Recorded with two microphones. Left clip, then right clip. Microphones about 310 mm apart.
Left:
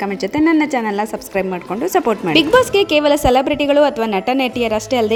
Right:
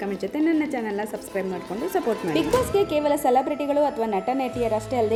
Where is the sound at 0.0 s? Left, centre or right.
Left.